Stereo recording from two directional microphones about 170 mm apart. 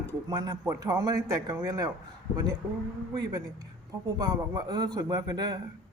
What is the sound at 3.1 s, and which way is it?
A man's voice, 20° right (ahead or behind).